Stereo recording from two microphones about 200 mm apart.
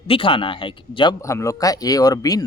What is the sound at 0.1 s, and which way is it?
Speech, 25° left (ahead or behind).